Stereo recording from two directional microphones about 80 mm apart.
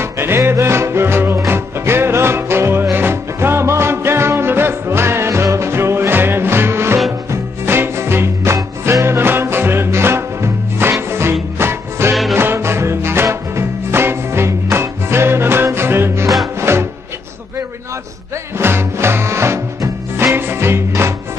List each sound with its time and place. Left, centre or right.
0.0 s music: right
12.1 s music: centre
12.4 s music: right
18.6 s music: right